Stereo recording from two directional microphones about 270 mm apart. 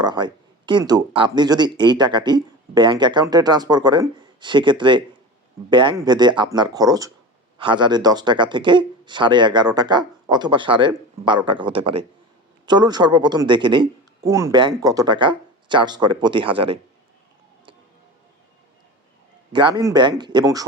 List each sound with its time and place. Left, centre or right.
0.0 s speech: centre
19.5 s speech: centre